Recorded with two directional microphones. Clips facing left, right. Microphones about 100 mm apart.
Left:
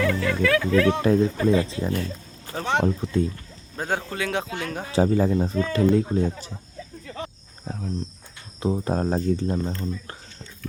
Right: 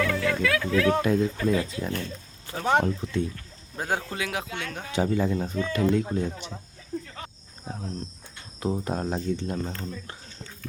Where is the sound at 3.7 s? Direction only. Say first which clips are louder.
Left 2 dB; 10° right (ahead or behind).